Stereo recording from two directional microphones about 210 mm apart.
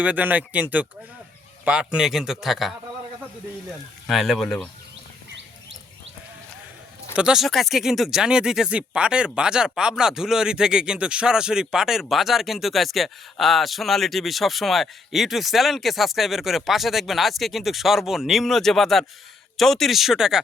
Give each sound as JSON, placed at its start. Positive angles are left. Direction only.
{"t": 0.0, "sound": "speech", "side_deg": -5}
{"t": 4.0, "sound": "speech", "side_deg": 0}
{"t": 7.2, "sound": "speech", "side_deg": -5}